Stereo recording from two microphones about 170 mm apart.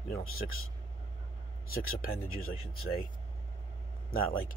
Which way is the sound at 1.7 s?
60° left (ahead or behind).